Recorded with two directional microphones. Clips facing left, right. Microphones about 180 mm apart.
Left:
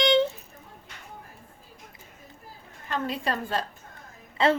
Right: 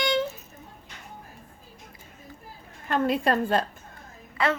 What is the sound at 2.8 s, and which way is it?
Speech, 55° right (ahead or behind).